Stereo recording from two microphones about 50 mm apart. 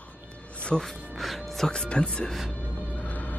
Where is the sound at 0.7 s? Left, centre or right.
Centre.